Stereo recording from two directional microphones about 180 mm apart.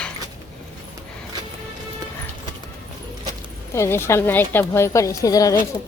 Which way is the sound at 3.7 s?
15° left (ahead or behind).